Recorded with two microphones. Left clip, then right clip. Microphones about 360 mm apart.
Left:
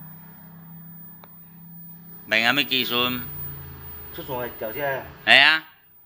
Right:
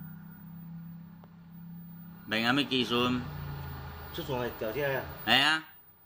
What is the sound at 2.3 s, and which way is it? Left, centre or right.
Speech, centre.